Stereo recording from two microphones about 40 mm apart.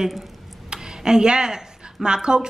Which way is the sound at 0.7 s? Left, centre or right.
Centre.